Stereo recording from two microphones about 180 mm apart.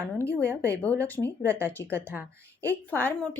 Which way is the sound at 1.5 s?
15° right (ahead or behind).